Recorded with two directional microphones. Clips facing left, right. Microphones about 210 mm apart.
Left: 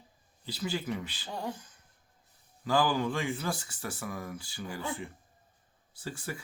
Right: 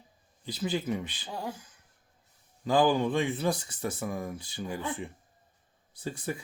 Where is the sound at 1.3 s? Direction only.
5° right (ahead or behind).